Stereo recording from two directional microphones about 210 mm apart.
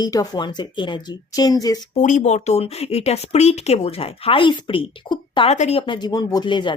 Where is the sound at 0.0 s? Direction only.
20° left (ahead or behind).